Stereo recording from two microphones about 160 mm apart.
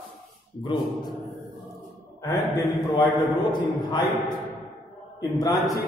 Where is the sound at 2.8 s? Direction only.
30° left (ahead or behind).